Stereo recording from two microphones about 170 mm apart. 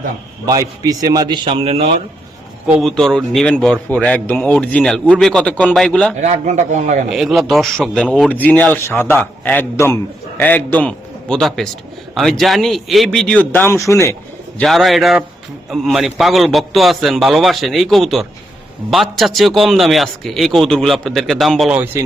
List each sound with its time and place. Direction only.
0.4 s a man's voice: 20° right (ahead or behind)
2.6 s a man's voice: 5° right (ahead or behind)
6.1 s speech: 45° right (ahead or behind)
7.1 s a man's voice: centre (ahead or behind); by 14.2 s 15° left (ahead or behind)
14.6 s a man's voice: centre (ahead or behind)